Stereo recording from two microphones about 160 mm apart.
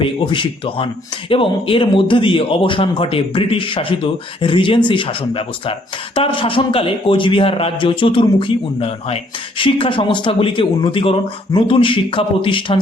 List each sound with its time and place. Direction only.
0.0 s speech: 30° left (ahead or behind)